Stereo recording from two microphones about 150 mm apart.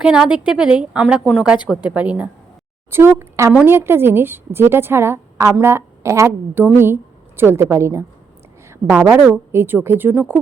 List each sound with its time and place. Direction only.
0.0 s a woman's voice: 5° right (ahead or behind)